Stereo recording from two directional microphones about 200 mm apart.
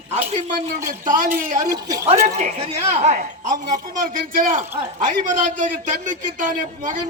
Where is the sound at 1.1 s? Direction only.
40° right (ahead or behind).